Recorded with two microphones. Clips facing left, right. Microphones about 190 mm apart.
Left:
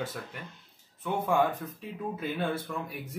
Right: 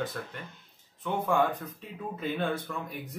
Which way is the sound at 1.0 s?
10° left (ahead or behind).